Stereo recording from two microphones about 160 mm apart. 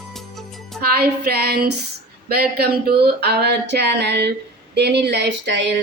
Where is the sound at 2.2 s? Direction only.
75° right (ahead or behind).